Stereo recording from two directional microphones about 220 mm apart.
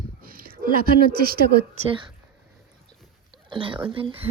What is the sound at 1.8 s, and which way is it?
Speech, 20° right (ahead or behind).